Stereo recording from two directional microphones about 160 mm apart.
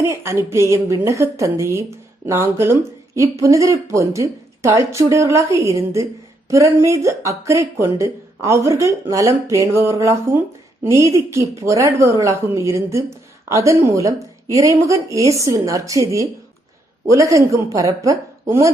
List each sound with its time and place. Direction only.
0.0 s a woman's voice: 15° right (ahead or behind)